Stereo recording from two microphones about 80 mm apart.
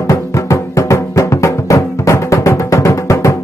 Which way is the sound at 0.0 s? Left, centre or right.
Left.